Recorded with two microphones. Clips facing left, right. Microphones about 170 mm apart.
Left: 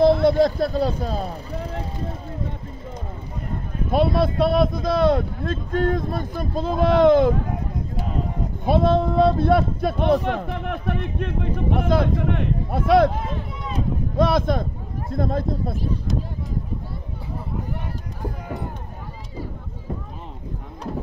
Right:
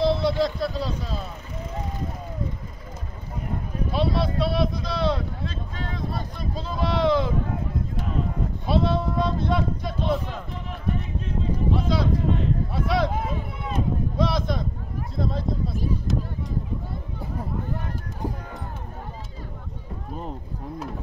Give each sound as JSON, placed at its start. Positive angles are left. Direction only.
{"t": 0.0, "sound": "speech", "side_deg": 55}
{"t": 1.2, "sound": "speech", "side_deg": 35}
{"t": 3.9, "sound": "speech", "side_deg": 50}
{"t": 8.6, "sound": "a man's voice", "side_deg": 50}
{"t": 13.1, "sound": "speech", "side_deg": -5}
{"t": 14.1, "sound": "speech", "side_deg": 55}